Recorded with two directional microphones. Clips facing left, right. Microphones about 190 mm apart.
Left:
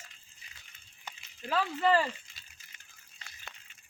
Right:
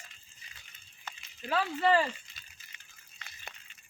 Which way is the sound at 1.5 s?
5° right (ahead or behind).